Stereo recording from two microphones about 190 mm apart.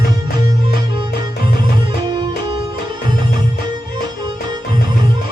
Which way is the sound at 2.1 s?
25° right (ahead or behind).